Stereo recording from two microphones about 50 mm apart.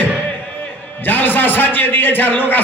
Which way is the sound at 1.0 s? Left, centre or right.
Left.